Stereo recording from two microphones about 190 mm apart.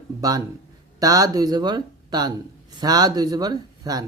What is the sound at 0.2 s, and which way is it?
Speech, 20° right (ahead or behind).